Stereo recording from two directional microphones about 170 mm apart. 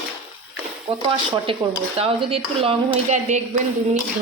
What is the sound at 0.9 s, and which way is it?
A woman's voice, 30° right (ahead or behind).